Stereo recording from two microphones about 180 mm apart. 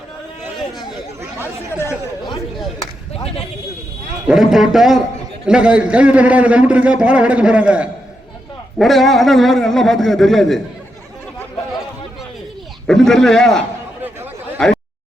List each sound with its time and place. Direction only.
1.4 s speech: 15° left (ahead or behind)
3.1 s speech: 35° left (ahead or behind)
4.3 s a man's voice: centre (ahead or behind)
12.9 s a man's voice: 5° left (ahead or behind)